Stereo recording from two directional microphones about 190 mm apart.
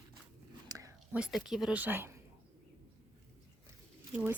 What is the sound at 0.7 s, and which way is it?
Whispering, 15° right (ahead or behind).